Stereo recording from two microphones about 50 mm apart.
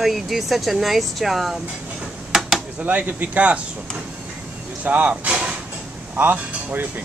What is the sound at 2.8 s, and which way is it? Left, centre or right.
Speech, right.